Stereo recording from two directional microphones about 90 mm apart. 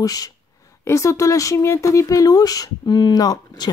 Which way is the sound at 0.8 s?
35° left (ahead or behind).